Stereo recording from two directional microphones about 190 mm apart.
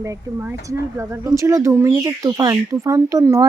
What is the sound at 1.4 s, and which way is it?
Speech, 15° right (ahead or behind).